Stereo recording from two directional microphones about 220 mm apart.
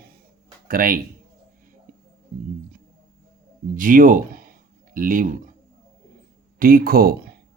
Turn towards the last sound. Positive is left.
turn(degrees=-45)  # may be behind; listen again after turning